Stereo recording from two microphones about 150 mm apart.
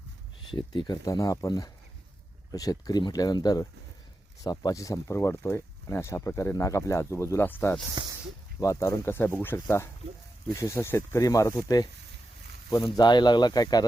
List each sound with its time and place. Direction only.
0.5 s speech: 30° left (ahead or behind); by 7.8 s 15° left (ahead or behind)
8.0 s speech: 30° right (ahead or behind)
8.6 s speech: 20° left (ahead or behind)